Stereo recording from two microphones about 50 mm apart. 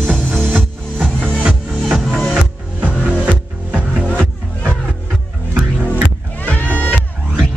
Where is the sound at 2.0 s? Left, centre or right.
Centre.